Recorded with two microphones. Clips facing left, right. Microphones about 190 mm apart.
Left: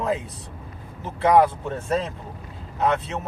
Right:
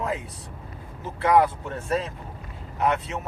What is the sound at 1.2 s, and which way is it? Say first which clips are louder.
Speech: left 2 dB; 25° left (ahead or behind).